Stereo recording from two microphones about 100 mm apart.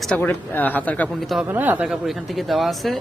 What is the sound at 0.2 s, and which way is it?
Speech, 20° left (ahead or behind).